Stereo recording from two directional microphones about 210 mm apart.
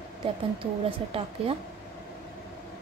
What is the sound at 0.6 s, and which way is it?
Speech, 25° right (ahead or behind).